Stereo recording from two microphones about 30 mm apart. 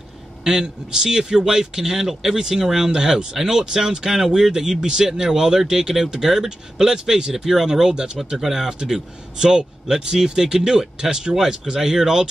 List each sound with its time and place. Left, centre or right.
0.4 s speech: centre
3.6 s speech: right
7.9 s speech: right
8.4 s speech: centre
9.9 s speech: centre